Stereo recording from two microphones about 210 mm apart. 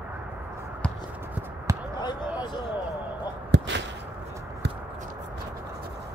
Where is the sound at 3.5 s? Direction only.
55° right (ahead or behind).